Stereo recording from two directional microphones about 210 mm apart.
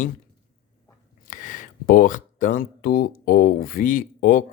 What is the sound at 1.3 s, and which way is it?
Speech, 40° left (ahead or behind).